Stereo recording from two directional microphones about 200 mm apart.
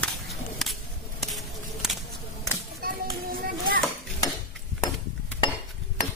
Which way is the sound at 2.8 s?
50° right (ahead or behind).